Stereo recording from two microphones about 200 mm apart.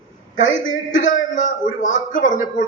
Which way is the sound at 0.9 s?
40° left (ahead or behind).